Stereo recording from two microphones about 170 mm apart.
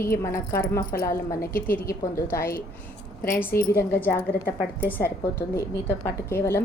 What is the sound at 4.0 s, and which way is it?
A woman's voice, 15° left (ahead or behind).